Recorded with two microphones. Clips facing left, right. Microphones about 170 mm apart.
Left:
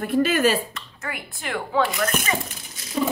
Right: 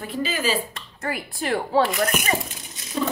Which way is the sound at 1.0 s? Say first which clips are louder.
Right 6 dB; 35° right (ahead or behind).